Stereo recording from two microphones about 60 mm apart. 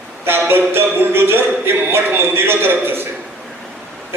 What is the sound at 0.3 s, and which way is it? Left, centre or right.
Speech, right.